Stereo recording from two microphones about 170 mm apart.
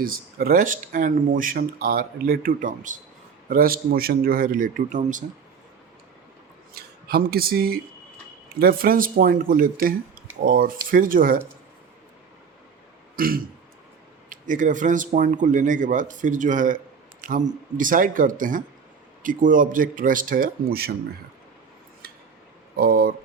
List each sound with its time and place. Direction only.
0.0 s speech: 60° right (ahead or behind)
3.5 s speech: 60° right (ahead or behind)
6.7 s speech: 65° right (ahead or behind)
13.1 s throat clearing: 60° right (ahead or behind)
14.3 s speech: 50° right (ahead or behind)
22.8 s speech: 60° right (ahead or behind)